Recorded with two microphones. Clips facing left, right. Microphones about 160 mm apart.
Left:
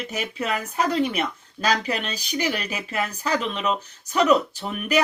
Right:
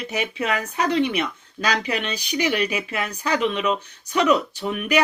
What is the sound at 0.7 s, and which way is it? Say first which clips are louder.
Speech: right 1 dB; 40° left (ahead or behind).